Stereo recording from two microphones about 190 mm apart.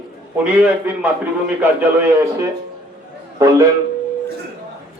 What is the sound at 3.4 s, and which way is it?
Speech, 20° right (ahead or behind).